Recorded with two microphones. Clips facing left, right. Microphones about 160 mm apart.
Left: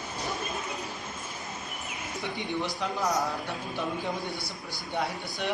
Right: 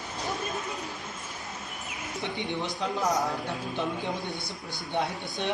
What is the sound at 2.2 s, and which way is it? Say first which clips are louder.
Speech: even; 20° right (ahead or behind).